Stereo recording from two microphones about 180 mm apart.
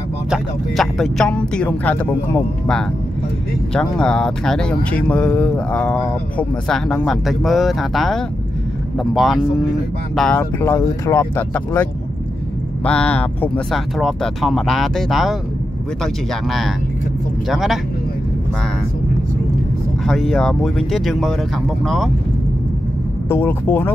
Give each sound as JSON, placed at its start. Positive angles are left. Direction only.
{"t": 0.3, "sound": "speech", "side_deg": 0}
{"t": 10.6, "sound": "speech", "side_deg": 15}
{"t": 20.1, "sound": "speech", "side_deg": 0}
{"t": 23.2, "sound": "speech", "side_deg": 15}